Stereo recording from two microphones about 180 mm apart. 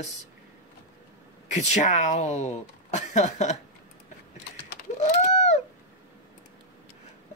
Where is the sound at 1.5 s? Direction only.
40° left (ahead or behind).